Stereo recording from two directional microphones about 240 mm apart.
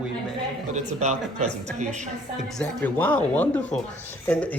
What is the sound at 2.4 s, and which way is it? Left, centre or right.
Speech, centre.